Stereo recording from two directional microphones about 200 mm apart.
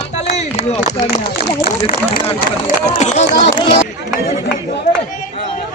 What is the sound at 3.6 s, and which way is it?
Speech, 25° left (ahead or behind).